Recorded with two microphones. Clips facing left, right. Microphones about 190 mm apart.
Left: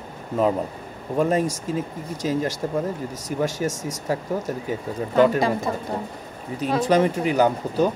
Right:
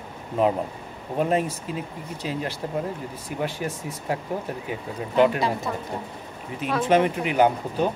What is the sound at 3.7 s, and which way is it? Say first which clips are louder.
Speech: left 3 dB; 90° left.